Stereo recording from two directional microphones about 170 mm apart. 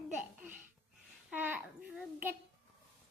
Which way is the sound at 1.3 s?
10° right (ahead or behind).